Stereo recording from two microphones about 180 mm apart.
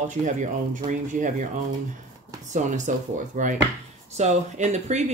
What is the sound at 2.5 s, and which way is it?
Speech, 45° right (ahead or behind).